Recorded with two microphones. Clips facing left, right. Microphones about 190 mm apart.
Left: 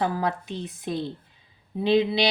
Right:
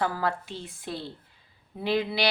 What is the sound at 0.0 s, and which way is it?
Speech, 20° left (ahead or behind).